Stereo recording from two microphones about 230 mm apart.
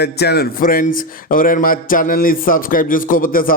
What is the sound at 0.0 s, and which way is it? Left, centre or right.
Speech, left.